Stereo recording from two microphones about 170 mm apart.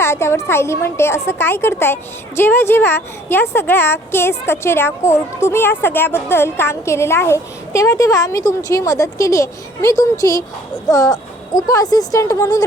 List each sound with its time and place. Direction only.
0.0 s a woman's voice: 15° left (ahead or behind)